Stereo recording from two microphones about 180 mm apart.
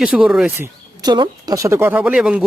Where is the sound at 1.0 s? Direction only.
25° right (ahead or behind); by 2.4 s 5° right (ahead or behind).